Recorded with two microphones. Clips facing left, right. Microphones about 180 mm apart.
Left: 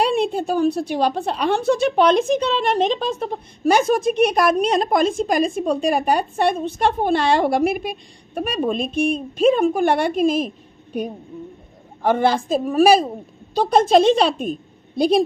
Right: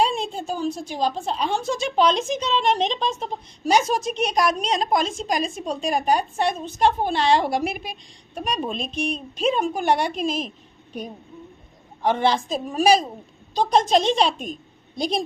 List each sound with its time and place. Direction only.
0.0 s a woman's voice: 60° left (ahead or behind)
12.0 s a woman's voice: 55° left (ahead or behind)